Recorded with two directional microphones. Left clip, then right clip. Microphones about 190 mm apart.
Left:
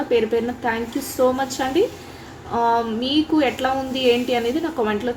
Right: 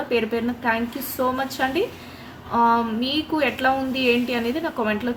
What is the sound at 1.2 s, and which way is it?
Speech, 5° left (ahead or behind).